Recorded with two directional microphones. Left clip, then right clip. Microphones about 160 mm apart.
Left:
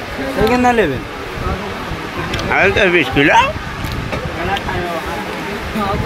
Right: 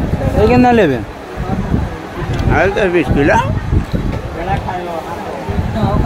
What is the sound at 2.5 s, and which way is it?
Speech, 5° right (ahead or behind).